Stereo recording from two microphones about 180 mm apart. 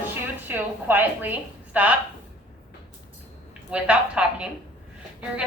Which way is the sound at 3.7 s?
5° right (ahead or behind).